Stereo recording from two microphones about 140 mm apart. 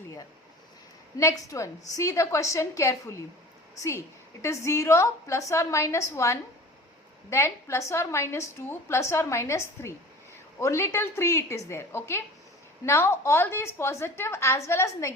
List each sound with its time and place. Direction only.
1.2 s a woman's voice: 20° left (ahead or behind)